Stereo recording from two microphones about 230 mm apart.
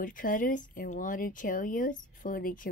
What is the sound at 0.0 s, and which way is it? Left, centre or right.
Speech, left.